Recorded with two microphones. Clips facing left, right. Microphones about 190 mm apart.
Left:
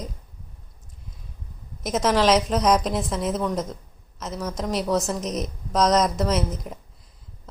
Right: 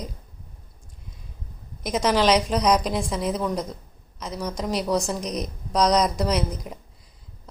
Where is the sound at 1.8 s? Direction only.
Centre (ahead or behind).